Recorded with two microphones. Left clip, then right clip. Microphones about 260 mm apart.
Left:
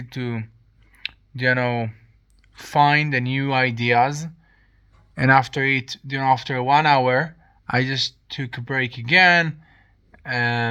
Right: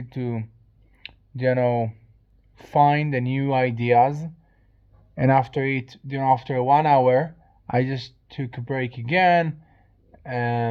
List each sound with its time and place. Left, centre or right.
0.1 s speech: centre
2.9 s speech: centre
3.2 s speech: left
3.6 s speech: centre
9.4 s a sound: left
10.2 s speech: centre